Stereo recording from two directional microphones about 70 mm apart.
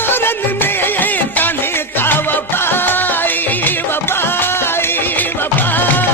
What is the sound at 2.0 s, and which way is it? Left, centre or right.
Music, left.